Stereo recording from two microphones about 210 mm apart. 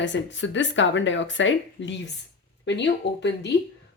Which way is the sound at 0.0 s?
60° left (ahead or behind).